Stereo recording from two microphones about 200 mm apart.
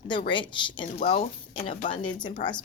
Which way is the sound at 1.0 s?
35° left (ahead or behind).